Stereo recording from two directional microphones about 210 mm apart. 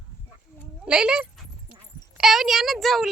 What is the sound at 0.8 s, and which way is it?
A child's voice, 5° right (ahead or behind).